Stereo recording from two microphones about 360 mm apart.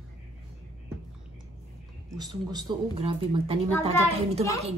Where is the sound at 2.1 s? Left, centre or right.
Centre.